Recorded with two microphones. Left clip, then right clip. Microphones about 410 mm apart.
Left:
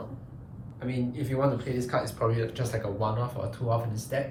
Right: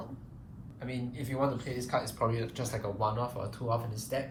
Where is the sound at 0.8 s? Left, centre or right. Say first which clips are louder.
Left 6 dB; centre.